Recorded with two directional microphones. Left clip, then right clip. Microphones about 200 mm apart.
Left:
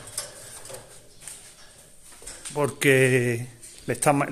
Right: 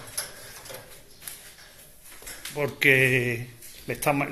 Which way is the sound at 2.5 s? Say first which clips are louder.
Even; 40° left (ahead or behind).